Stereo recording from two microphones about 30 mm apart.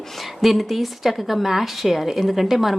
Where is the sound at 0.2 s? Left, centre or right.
Centre.